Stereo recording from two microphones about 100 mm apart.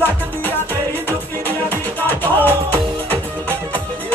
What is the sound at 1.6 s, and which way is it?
Music, 20° left (ahead or behind).